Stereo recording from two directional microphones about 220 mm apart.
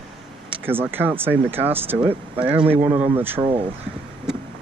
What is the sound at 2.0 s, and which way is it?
Speech, 25° right (ahead or behind).